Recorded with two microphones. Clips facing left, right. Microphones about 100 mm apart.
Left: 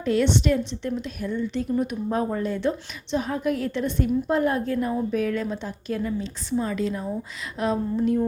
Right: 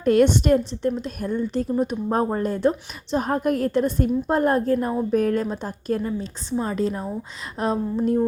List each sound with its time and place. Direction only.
0.0 s a woman's voice: 50° right (ahead or behind)